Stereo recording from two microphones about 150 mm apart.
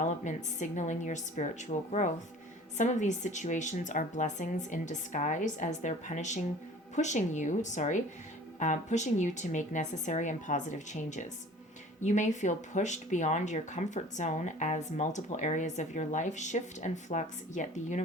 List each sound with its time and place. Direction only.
0.0 s a woman's voice: 55° left (ahead or behind)